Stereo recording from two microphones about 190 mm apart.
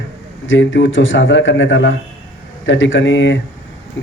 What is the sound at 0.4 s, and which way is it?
A man's voice, 80° left.